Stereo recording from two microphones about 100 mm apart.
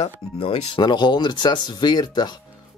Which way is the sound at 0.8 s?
50° left (ahead or behind).